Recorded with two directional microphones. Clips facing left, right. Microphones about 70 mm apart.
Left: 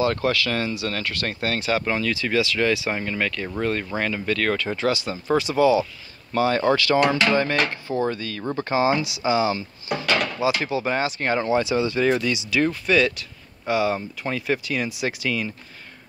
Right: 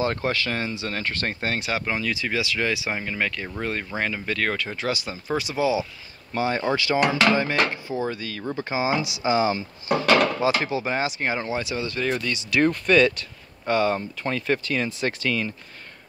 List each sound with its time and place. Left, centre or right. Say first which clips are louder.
0.0 s speech: left 3 dB; right
11.3 s speech: left 6 dB; centre